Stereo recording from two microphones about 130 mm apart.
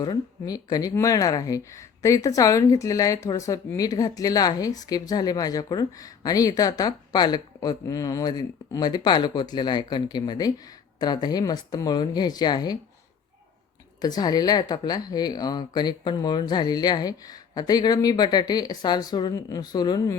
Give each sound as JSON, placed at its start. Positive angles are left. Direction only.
{"t": 0.0, "sound": "speech", "side_deg": 30}
{"t": 14.0, "sound": "a woman's voice", "side_deg": 30}